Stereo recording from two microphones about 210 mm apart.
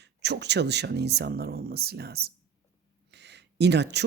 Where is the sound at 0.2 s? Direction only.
55° right (ahead or behind).